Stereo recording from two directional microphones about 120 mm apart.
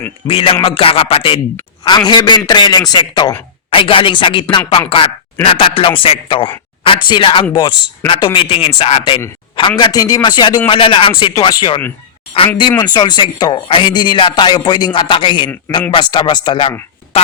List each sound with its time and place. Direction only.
0.3 s speech: 55° left (ahead or behind)
1.8 s a man's voice: 40° left (ahead or behind)
3.7 s a woman's voice: 50° left (ahead or behind)
11.3 s a man's voice: 35° left (ahead or behind)
12.8 s a man's voice: 35° left (ahead or behind)